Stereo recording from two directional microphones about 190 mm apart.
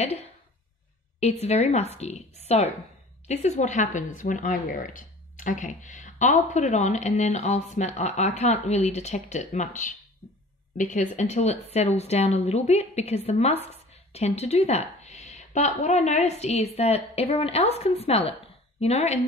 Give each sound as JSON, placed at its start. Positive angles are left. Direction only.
{"t": 0.0, "sound": "speech", "side_deg": 35}
{"t": 1.4, "sound": "speech", "side_deg": 35}
{"t": 10.8, "sound": "speech", "side_deg": 40}